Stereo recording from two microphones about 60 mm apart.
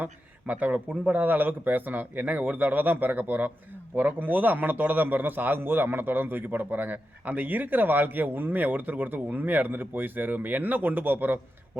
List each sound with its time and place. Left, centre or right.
0.0 s a man's voice: right